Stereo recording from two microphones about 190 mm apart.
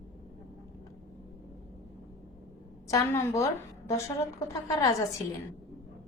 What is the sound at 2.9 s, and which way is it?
A woman's voice, 15° left (ahead or behind).